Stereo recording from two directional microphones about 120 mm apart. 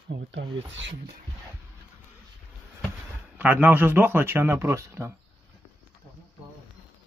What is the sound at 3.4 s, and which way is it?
A man's voice, 15° right (ahead or behind).